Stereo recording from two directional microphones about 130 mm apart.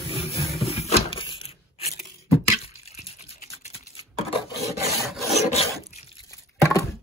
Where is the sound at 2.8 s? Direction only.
50° left (ahead or behind).